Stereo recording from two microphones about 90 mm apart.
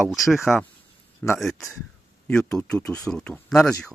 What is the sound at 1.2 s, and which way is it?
Speech, 25° left (ahead or behind).